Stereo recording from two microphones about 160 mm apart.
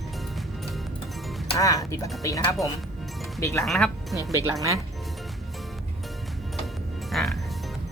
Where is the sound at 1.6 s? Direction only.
20° left (ahead or behind).